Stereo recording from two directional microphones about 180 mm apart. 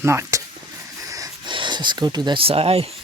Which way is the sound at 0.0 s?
15° right (ahead or behind).